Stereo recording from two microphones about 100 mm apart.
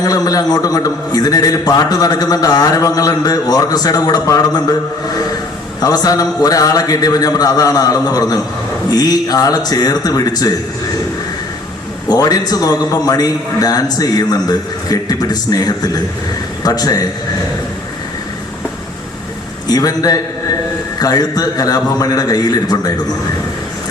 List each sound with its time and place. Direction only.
0.0 s a man's voice: 40° left (ahead or behind)
5.8 s a man's voice: 40° left (ahead or behind)
12.0 s a man's voice: 40° left (ahead or behind)
19.6 s a man's voice: 40° left (ahead or behind)